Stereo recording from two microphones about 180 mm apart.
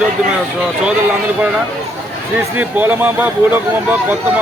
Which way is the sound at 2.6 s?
10° right (ahead or behind).